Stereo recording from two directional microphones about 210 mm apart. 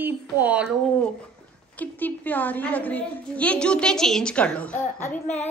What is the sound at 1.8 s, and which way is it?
A woman's voice, 10° left (ahead or behind).